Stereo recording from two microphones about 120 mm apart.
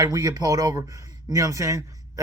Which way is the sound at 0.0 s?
30° right (ahead or behind).